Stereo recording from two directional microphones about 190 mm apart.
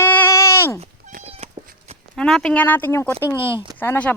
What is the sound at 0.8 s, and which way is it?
Cat, 35° right (ahead or behind).